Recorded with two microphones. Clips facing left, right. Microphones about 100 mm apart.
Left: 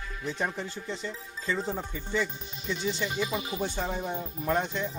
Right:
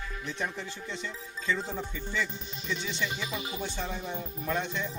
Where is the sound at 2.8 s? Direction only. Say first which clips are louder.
Left 8 dB; 35° left (ahead or behind).